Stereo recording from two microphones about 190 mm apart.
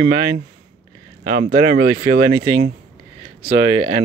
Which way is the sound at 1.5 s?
35° right (ahead or behind).